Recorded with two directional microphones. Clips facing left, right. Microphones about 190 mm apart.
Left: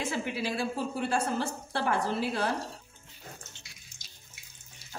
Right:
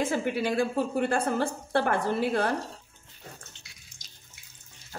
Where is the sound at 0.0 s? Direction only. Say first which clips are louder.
Right 5 dB; 50° right (ahead or behind).